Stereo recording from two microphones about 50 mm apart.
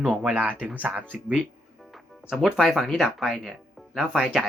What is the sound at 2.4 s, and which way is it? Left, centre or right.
Speech, centre.